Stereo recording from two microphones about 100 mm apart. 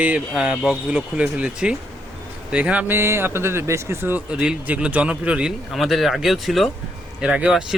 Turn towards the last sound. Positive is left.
turn(degrees=-5)  # may be behind; listen again after turning